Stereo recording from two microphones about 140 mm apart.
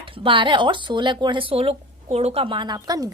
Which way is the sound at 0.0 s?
40° right (ahead or behind).